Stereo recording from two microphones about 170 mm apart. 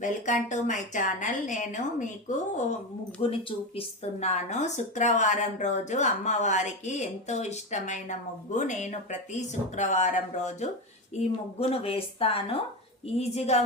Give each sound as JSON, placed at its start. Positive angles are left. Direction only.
{"t": 0.0, "sound": "a woman's voice", "side_deg": 45}
{"t": 3.2, "sound": "a woman's voice", "side_deg": 35}